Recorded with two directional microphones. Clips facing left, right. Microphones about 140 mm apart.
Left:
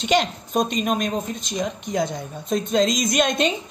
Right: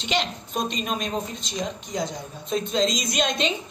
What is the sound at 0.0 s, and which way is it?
A woman's voice, 45° left (ahead or behind).